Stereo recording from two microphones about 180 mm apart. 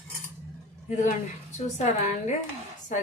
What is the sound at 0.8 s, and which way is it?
A woman's voice, 45° left (ahead or behind).